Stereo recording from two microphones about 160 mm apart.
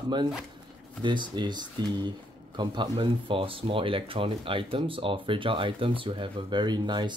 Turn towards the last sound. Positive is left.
turn(degrees=-25)  # may be behind; listen again after turning